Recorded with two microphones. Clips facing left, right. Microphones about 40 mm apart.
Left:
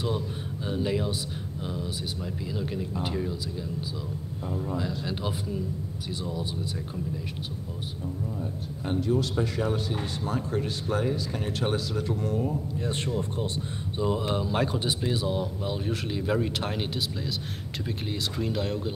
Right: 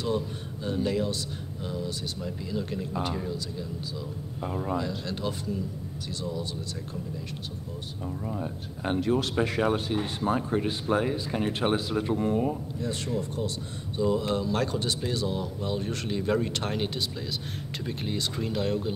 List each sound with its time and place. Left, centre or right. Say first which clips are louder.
0.7 s speech: right 1 dB; centre
4.5 s speech: right 2 dB; right
4.7 s speech: even; centre
8.4 s speech: even; right
9.9 s speech: right 4 dB; right
12.8 s speech: even; left
13.9 s speech: right 2 dB; centre